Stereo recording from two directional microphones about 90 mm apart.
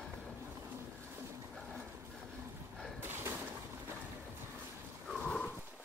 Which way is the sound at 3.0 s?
25° right (ahead or behind).